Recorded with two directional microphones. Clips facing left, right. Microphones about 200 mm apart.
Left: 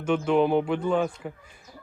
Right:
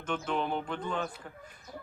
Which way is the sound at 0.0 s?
10° left (ahead or behind).